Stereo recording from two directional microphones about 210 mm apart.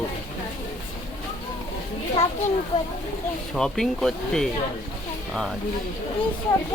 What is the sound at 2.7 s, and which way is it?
Speech, 20° left (ahead or behind).